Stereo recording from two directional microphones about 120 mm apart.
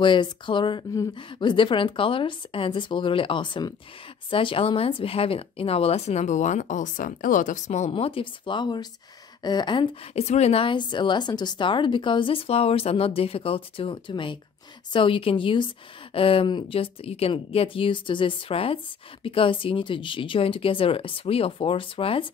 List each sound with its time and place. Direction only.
0.0 s a woman's voice: 40° left (ahead or behind); by 7.9 s 75° left (ahead or behind)
7.9 s a woman's voice: 45° left (ahead or behind)
10.1 s a woman's voice: 65° left (ahead or behind); by 22.2 s 50° left (ahead or behind)